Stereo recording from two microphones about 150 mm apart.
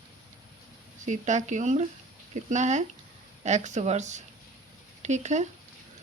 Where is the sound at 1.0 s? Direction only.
50° right (ahead or behind).